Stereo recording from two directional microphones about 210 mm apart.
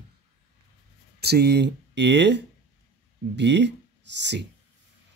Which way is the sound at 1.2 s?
50° right (ahead or behind).